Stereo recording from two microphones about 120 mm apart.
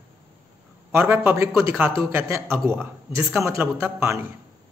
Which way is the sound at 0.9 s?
20° right (ahead or behind).